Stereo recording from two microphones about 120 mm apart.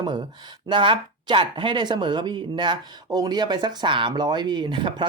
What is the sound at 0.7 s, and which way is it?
Speech, 45° right (ahead or behind).